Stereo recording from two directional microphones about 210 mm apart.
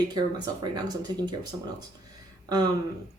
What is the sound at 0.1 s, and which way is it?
Speech, 20° right (ahead or behind).